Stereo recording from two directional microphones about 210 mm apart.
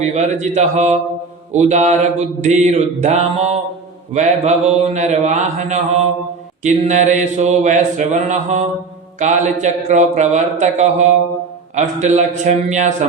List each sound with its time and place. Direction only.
0.0 s mantra: 35° right (ahead or behind)